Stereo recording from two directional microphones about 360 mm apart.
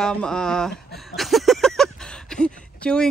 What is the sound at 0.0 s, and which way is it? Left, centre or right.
Speech, centre.